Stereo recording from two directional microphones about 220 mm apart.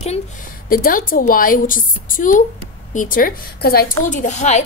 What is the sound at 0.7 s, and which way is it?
A woman's voice, 40° left (ahead or behind).